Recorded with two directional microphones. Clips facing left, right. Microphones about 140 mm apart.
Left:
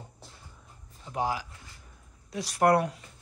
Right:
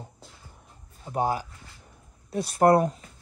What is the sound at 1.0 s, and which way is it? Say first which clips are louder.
Speech: right 4 dB; 45° right (ahead or behind).